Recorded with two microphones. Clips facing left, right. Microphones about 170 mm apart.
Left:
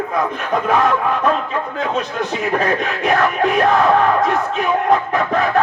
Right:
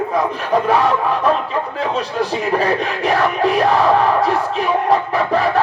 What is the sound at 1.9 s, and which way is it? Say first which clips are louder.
Speech: right 3 dB; 35° right (ahead or behind).